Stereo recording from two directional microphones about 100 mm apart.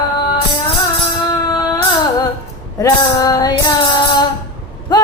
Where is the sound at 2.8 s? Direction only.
35° left (ahead or behind).